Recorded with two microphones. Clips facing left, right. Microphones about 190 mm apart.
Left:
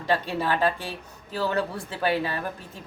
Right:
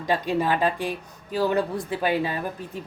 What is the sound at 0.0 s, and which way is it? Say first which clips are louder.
Speech: right 2 dB; 15° right (ahead or behind).